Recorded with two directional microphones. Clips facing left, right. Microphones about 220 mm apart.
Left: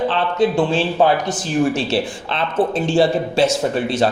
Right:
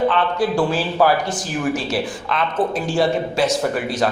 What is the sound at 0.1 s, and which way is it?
Speech, 25° left (ahead or behind).